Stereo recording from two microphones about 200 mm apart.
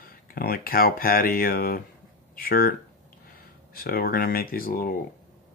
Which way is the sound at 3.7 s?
50° left (ahead or behind).